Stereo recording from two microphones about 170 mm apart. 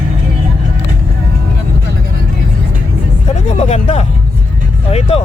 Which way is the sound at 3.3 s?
40° left (ahead or behind).